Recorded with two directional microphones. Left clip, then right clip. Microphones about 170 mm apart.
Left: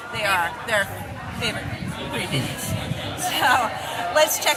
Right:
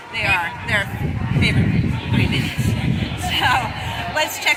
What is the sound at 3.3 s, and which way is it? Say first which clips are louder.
Speech: right 1 dB; 20° left (ahead or behind).